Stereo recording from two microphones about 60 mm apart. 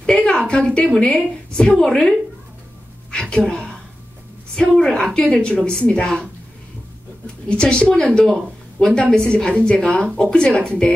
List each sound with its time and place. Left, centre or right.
0.0 s a sound: centre
0.5 s a woman's voice: centre
1.8 s speech: centre
3.1 s a sound: centre
4.6 s speech: centre
7.4 s speech: centre